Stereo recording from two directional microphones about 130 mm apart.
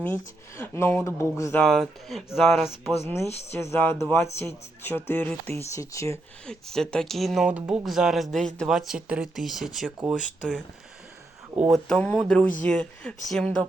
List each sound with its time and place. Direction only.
0.0 s speech: 20° left (ahead or behind)
1.5 s speech: centre (ahead or behind)
3.1 s speech: 20° left (ahead or behind)
5.7 s speech: 25° left (ahead or behind)
6.4 s speech: 5° left (ahead or behind)
11.7 s speech: 10° left (ahead or behind)